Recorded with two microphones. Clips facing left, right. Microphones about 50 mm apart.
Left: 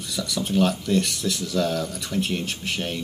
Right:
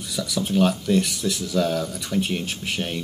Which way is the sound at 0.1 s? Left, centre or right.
Centre.